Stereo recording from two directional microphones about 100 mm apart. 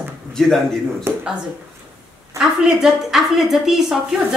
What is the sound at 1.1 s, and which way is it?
Speech, 25° right (ahead or behind).